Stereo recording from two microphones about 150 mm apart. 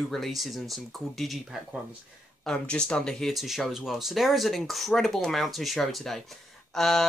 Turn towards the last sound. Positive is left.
turn(degrees=0)  # may be behind; listen again after turning